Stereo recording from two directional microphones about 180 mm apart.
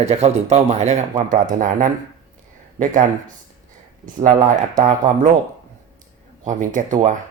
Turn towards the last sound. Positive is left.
turn(degrees=-45)  # may be behind; listen again after turning